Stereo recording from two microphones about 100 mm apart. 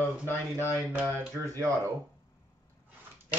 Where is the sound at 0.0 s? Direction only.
25° left (ahead or behind).